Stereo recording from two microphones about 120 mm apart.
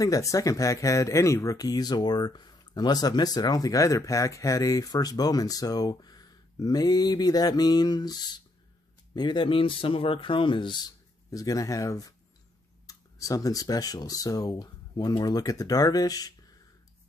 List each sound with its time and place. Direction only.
0.0 s speech: 30° left (ahead or behind)